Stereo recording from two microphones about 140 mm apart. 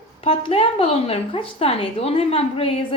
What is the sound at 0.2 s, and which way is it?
A woman's voice, 40° left (ahead or behind).